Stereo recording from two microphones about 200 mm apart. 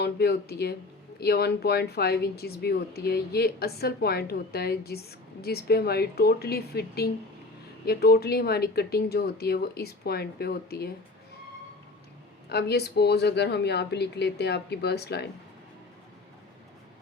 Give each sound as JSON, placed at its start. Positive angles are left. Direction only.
{"t": 0.0, "sound": "speech", "side_deg": 50}
{"t": 12.5, "sound": "a woman's voice", "side_deg": 55}